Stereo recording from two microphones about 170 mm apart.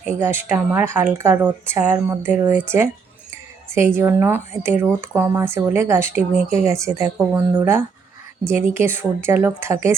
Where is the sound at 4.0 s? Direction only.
15° right (ahead or behind).